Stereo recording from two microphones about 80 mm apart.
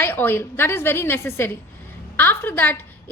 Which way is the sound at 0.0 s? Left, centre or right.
Left.